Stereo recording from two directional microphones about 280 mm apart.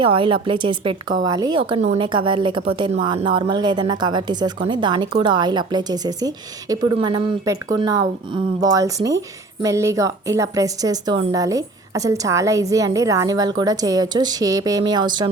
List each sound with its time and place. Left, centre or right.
0.0 s a woman's voice: centre